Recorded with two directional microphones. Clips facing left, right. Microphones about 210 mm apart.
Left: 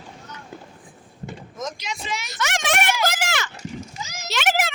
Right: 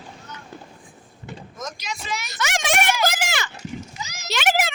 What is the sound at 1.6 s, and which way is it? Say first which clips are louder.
Vehicle: left 3 dB; 25° left (ahead or behind).